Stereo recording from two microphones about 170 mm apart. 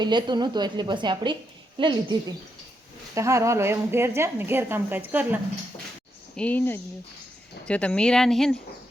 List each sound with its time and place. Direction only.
0.0 s a woman's voice: 25° right (ahead or behind); by 5.4 s 10° right (ahead or behind)
6.3 s speech: 5° left (ahead or behind)